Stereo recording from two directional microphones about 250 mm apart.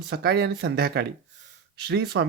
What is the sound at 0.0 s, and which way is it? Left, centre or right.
Speech, right.